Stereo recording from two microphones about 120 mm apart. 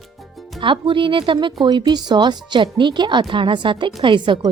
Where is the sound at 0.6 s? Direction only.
45° right (ahead or behind).